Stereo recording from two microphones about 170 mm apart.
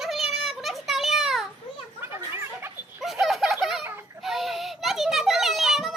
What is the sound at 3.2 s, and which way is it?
Bird, centre (ahead or behind).